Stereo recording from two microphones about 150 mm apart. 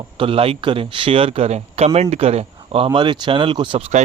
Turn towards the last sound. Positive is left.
turn(degrees=-35)  # may be behind; listen again after turning